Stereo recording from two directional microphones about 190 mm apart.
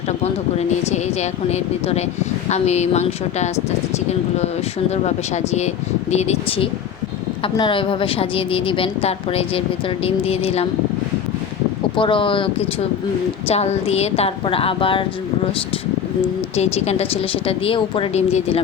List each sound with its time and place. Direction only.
0.9 s a woman's voice: 35° left (ahead or behind)
5.0 s a woman's voice: 35° left (ahead or behind)
11.9 s a woman's voice: 25° left (ahead or behind)
16.6 s a woman's voice: 35° left (ahead or behind)